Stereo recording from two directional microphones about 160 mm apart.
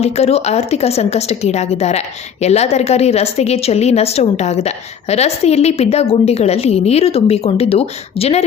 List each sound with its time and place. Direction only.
0.0 s a woman's voice: 40° left (ahead or behind)